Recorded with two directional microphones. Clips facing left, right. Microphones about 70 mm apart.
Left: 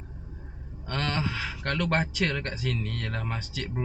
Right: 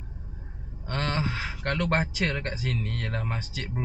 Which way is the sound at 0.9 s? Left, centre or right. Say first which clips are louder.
Right 1 dB; right.